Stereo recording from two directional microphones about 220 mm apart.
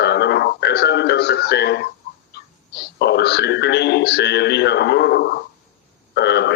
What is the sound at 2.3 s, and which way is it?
Speech, 50° left (ahead or behind).